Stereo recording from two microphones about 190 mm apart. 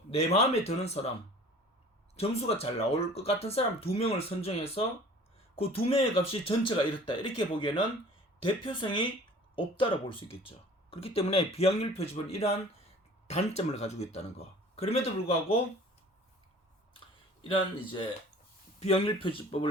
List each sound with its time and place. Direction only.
0.1 s speech: 35° left (ahead or behind)
2.1 s speech: 30° left (ahead or behind)
18.8 s speech: 30° left (ahead or behind)